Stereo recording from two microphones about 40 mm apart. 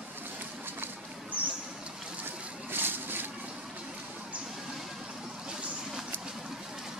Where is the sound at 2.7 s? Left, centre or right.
Right.